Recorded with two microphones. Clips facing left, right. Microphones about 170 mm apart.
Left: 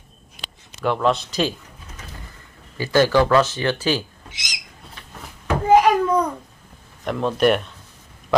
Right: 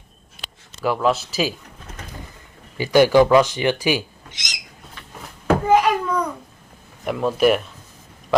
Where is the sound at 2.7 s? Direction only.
15° right (ahead or behind).